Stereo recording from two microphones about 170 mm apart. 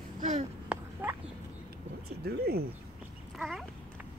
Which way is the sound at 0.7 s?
15° right (ahead or behind).